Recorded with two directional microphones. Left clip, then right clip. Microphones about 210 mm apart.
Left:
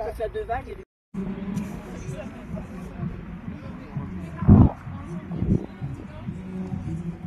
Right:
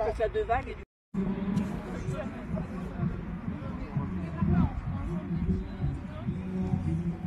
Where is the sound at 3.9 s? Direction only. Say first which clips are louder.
Even; centre (ahead or behind).